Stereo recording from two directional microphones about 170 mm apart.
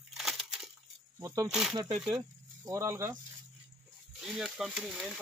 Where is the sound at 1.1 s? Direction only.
20° right (ahead or behind).